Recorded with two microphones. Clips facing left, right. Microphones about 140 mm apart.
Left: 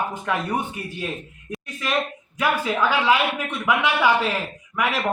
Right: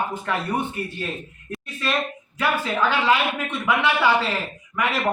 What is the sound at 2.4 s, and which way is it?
A man's voice, 10° left (ahead or behind).